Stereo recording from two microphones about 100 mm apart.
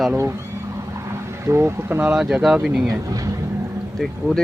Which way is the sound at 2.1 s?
5° right (ahead or behind).